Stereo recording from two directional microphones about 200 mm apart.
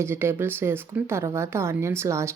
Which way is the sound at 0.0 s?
10° right (ahead or behind).